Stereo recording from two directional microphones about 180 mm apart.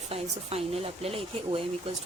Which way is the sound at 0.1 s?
35° right (ahead or behind).